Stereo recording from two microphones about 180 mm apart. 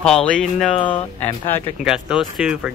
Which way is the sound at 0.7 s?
30° left (ahead or behind).